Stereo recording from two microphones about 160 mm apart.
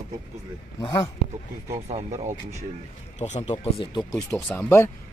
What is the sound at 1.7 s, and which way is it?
Speech, 40° right (ahead or behind).